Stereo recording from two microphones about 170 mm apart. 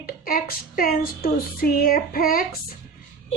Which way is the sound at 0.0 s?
60° left (ahead or behind).